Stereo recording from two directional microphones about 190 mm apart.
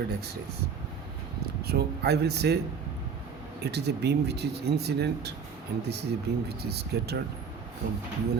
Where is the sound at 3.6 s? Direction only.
60° right (ahead or behind).